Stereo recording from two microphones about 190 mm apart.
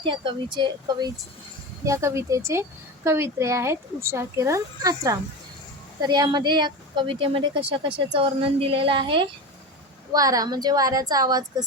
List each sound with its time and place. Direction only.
0.0 s speech: 25° right (ahead or behind)